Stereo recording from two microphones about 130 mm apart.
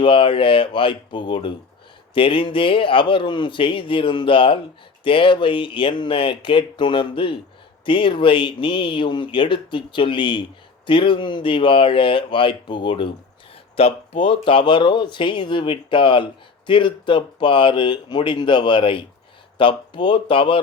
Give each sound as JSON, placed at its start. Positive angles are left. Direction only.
{"t": 0.0, "sound": "speech", "side_deg": 40}